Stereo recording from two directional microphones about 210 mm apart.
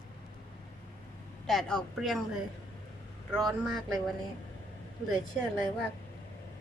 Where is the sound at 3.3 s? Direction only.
Centre (ahead or behind).